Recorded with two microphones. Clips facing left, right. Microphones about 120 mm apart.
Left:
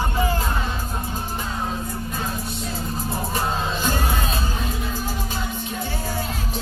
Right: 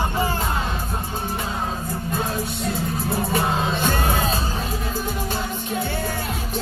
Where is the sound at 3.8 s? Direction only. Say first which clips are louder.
Right 2 dB; 50° right (ahead or behind).